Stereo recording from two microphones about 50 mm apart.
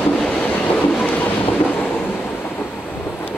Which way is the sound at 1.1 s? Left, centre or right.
Left.